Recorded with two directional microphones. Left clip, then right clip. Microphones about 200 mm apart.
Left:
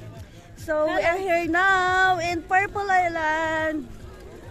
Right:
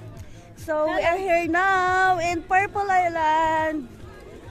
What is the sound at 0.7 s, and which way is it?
Speech, 10° right (ahead or behind).